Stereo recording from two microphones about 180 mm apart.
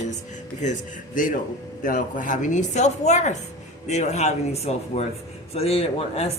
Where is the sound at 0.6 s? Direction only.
40° left (ahead or behind).